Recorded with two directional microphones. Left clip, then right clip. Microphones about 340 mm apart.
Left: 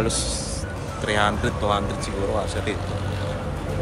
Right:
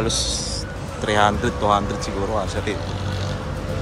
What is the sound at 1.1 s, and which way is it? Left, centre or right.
Speech, centre.